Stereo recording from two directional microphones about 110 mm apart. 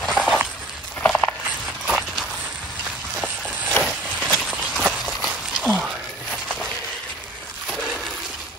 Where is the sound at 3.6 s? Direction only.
10° left (ahead or behind).